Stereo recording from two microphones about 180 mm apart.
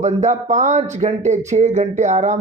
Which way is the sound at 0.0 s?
40° right (ahead or behind).